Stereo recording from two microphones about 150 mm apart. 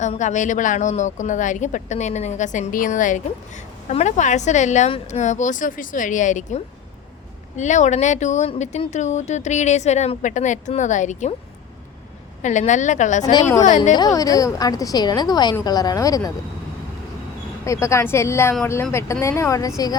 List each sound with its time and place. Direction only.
0.0 s a woman's voice: 55° left (ahead or behind)
12.4 s a woman's voice: 55° left (ahead or behind)
13.9 s a woman's voice: 25° left (ahead or behind)
17.7 s a woman's voice: 20° left (ahead or behind)